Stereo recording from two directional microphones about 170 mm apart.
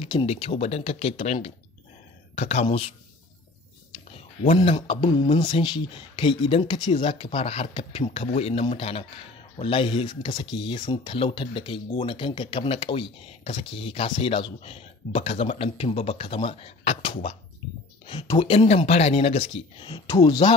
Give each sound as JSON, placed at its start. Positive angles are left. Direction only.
{"t": 0.0, "sound": "speech", "side_deg": 30}
{"t": 4.6, "sound": "speech", "side_deg": 35}
{"t": 18.2, "sound": "speech", "side_deg": 20}
{"t": 18.5, "sound": "speech", "side_deg": 35}